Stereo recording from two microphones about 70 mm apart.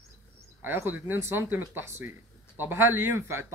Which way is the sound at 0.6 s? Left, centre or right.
Right.